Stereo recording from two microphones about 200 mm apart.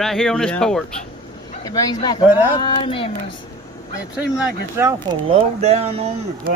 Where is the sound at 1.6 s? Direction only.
20° left (ahead or behind).